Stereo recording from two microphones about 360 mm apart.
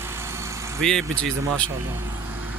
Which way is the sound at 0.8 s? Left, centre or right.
Centre.